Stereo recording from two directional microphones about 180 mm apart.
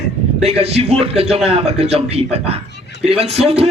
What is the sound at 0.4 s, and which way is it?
Speech, 35° right (ahead or behind).